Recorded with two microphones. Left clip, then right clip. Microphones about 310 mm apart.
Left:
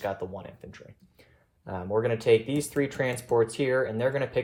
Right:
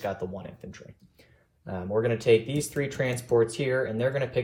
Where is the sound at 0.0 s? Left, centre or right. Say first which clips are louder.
Even; left.